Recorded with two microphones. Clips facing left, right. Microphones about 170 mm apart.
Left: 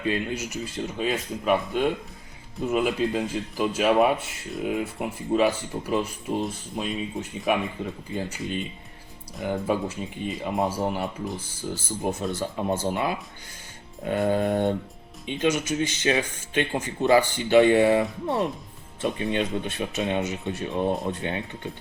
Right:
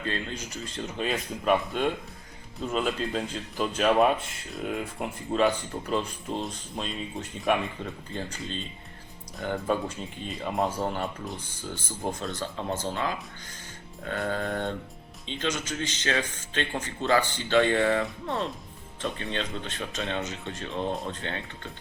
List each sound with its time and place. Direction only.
0.0 s speech: 15° left (ahead or behind)
10.3 s speech: 20° left (ahead or behind)